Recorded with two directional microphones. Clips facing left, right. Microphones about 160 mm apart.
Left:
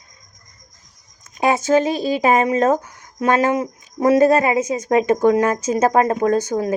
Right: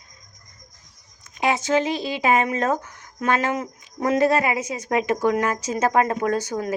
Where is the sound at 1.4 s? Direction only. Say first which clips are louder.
Left 5 dB; 45° left (ahead or behind).